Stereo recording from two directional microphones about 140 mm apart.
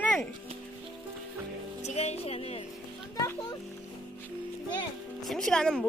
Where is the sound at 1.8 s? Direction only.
50° left (ahead or behind).